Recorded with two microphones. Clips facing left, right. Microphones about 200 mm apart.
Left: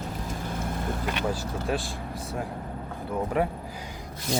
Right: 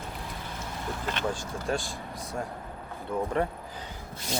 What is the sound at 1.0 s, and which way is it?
Speech, 10° left (ahead or behind).